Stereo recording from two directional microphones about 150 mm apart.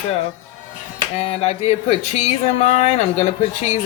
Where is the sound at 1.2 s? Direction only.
45° left (ahead or behind).